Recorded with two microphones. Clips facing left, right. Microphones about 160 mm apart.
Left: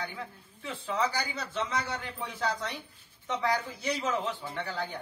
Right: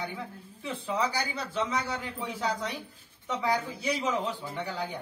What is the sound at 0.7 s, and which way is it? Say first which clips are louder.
A man's voice: right 1 dB; 15° right (ahead or behind).